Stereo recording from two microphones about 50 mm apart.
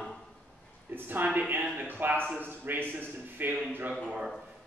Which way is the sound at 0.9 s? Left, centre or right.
Right.